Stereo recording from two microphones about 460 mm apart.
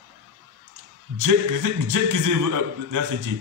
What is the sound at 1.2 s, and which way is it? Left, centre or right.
A man's voice, right.